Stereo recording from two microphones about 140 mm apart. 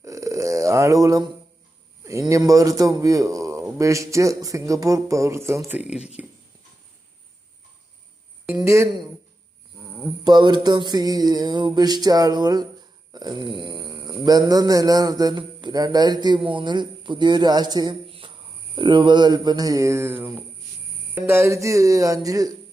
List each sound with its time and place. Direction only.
0.0 s a sound: 25° right (ahead or behind)
2.0 s a man's voice: 25° right (ahead or behind)
8.5 s a man's voice: 20° right (ahead or behind)
10.2 s a man's voice: 30° right (ahead or behind)